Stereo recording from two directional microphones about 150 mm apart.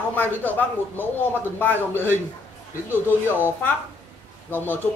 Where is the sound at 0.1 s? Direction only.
10° left (ahead or behind).